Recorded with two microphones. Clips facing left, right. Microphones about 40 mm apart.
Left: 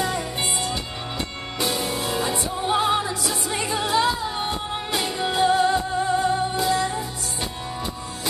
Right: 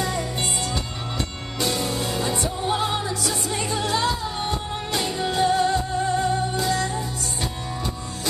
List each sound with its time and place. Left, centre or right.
0.0 s music: centre
2.3 s music: centre